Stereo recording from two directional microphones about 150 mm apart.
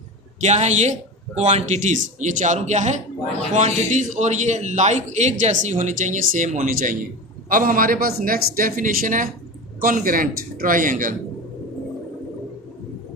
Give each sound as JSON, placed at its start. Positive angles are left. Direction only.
{"t": 0.4, "sound": "a man's voice", "side_deg": -50}
{"t": 7.5, "sound": "speech", "side_deg": -65}